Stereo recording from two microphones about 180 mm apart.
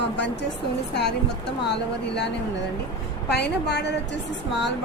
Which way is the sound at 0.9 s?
70° left (ahead or behind).